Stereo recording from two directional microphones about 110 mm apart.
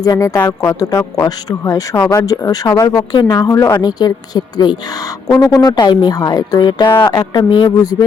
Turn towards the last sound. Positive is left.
turn(degrees=40)  # may be behind; listen again after turning